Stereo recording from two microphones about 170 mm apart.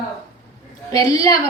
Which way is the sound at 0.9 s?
20° left (ahead or behind).